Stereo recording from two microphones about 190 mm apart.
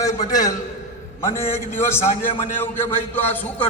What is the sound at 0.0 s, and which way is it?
A man's voice, 20° left (ahead or behind).